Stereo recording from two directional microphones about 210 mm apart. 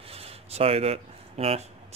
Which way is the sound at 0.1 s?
30° right (ahead or behind).